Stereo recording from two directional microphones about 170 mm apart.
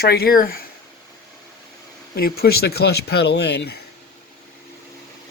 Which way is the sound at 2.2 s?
65° left (ahead or behind).